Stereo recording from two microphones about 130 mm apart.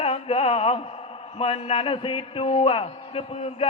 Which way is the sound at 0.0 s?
50° left (ahead or behind).